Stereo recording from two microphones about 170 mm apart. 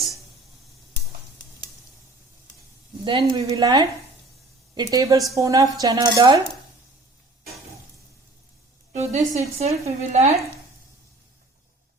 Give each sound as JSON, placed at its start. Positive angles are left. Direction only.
{"t": 3.0, "sound": "a woman's voice", "side_deg": -30}
{"t": 8.9, "sound": "speech", "side_deg": -45}